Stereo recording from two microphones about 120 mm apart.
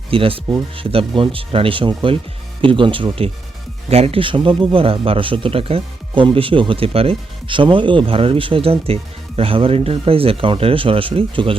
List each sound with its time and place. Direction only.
0.1 s speech: 50° right (ahead or behind)